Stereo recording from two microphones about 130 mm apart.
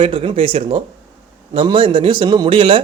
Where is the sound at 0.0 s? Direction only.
45° right (ahead or behind).